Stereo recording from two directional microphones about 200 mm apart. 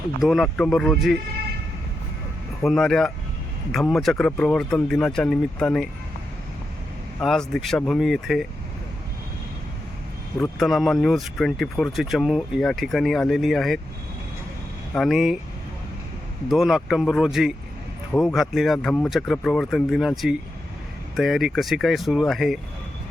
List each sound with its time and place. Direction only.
0.2 s speech: centre (ahead or behind)
2.6 s speech: centre (ahead or behind)
7.2 s speech: centre (ahead or behind)
10.6 s speech: centre (ahead or behind)
14.9 s speech: centre (ahead or behind)
16.5 s speech: centre (ahead or behind)
18.1 s speech: 10° left (ahead or behind)
18.3 s speech: centre (ahead or behind)